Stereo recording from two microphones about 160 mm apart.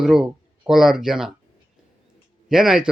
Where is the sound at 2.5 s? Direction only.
5° right (ahead or behind).